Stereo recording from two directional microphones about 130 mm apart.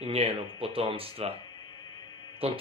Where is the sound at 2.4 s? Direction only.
45° right (ahead or behind).